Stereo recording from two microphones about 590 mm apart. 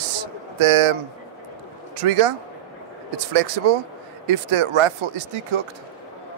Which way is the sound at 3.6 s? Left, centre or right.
Right.